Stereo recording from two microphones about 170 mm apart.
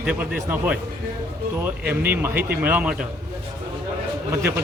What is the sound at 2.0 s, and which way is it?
Speech, 10° right (ahead or behind).